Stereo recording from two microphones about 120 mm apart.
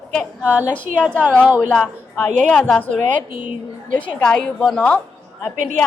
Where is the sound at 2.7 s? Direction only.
10° left (ahead or behind).